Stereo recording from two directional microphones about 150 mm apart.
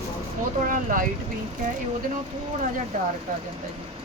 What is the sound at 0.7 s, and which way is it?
Speech, 60° right (ahead or behind).